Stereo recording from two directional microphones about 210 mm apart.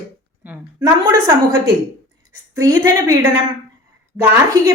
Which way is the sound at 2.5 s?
15° right (ahead or behind).